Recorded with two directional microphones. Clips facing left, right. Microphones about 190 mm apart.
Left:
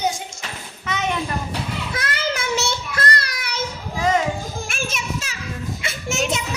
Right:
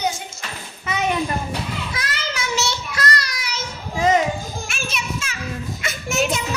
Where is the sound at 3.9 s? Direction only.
20° right (ahead or behind).